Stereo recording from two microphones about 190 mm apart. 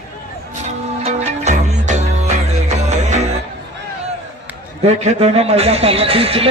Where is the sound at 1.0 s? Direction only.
35° right (ahead or behind).